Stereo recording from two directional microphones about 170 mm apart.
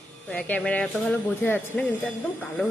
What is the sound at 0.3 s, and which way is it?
Speech, 10° left (ahead or behind).